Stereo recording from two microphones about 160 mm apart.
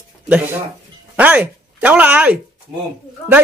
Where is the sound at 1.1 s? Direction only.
10° right (ahead or behind).